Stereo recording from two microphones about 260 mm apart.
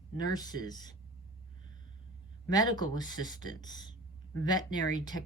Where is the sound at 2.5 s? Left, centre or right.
Centre.